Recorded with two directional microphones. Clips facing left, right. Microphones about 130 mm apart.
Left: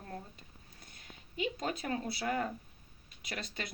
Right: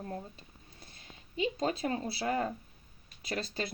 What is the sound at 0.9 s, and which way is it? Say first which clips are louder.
Speech: even; 30° right (ahead or behind).